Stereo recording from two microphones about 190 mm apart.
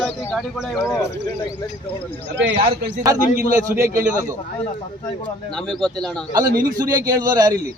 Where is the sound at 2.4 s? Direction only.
70° right (ahead or behind).